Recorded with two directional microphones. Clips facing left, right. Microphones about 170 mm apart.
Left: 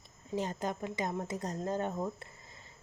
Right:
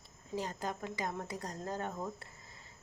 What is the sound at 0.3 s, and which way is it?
Speech, 20° left (ahead or behind).